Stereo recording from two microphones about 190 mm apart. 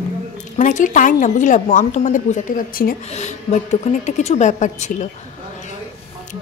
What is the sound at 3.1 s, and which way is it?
A woman's voice, 35° left (ahead or behind).